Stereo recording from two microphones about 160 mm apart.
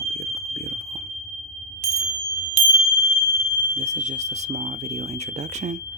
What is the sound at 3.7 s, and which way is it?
Speech, 45° right (ahead or behind).